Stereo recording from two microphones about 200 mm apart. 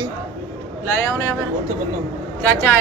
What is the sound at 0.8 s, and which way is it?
Speech, 15° left (ahead or behind).